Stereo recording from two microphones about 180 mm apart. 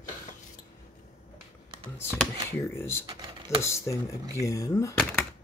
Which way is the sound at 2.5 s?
15° left (ahead or behind).